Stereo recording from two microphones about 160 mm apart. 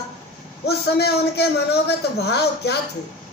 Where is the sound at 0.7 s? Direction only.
90° left.